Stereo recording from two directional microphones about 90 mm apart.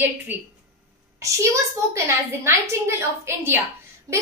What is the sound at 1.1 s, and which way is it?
A woman's voice, 35° right (ahead or behind).